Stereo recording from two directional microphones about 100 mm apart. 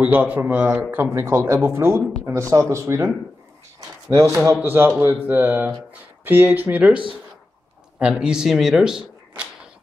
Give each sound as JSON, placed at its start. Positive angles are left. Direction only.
{"t": 0.0, "sound": "speech", "side_deg": -15}
{"t": 4.1, "sound": "speech", "side_deg": -30}
{"t": 4.6, "sound": "speech", "side_deg": -20}
{"t": 8.0, "sound": "speech", "side_deg": -10}